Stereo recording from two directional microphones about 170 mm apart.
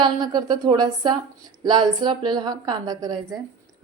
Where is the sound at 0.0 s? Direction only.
25° right (ahead or behind).